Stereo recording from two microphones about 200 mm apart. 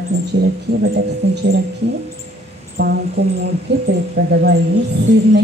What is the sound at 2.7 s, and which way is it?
Speech, 55° right (ahead or behind).